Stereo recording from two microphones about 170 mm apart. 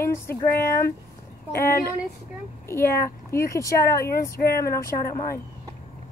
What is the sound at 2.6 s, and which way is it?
Speech, 15° left (ahead or behind).